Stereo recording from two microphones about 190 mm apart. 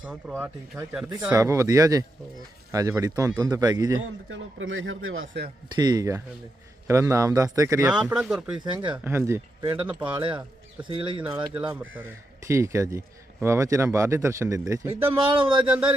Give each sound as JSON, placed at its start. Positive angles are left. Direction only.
{"t": 0.0, "sound": "speech", "side_deg": -5}
{"t": 4.0, "sound": "a man's voice", "side_deg": -90}
{"t": 5.7, "sound": "speech", "side_deg": -20}
{"t": 7.9, "sound": "speech", "side_deg": -5}
{"t": 8.5, "sound": "speech", "side_deg": -25}
{"t": 9.0, "sound": "speech", "side_deg": -15}
{"t": 10.8, "sound": "speech", "side_deg": -25}
{"t": 11.3, "sound": "speech", "side_deg": -5}
{"t": 15.3, "sound": "speech", "side_deg": -25}
{"t": 15.6, "sound": "speech", "side_deg": -5}